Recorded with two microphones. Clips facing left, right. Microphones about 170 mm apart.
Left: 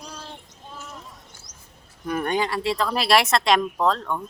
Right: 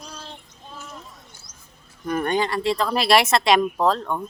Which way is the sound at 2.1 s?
5° left (ahead or behind).